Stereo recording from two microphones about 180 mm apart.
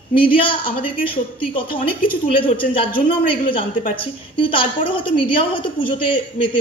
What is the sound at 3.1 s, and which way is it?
A woman's voice, 30° left (ahead or behind).